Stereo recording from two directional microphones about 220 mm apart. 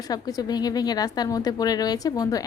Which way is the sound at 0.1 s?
15° left (ahead or behind).